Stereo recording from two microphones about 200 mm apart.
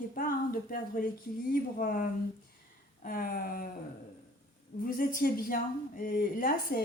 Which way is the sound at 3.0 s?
45° left (ahead or behind).